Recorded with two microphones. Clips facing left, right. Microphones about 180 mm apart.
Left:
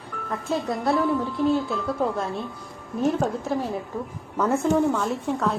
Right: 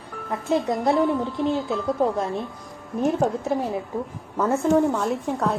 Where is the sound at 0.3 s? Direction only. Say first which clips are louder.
Right 4 dB; 20° right (ahead or behind).